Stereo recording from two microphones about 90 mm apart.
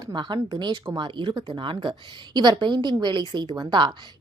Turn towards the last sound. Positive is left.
turn(degrees=-60)  # may be behind; listen again after turning